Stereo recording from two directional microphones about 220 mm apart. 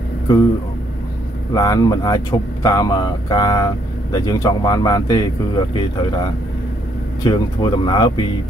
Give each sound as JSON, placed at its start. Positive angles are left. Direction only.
{"t": 1.5, "sound": "speech", "side_deg": 15}
{"t": 7.2, "sound": "speech", "side_deg": 20}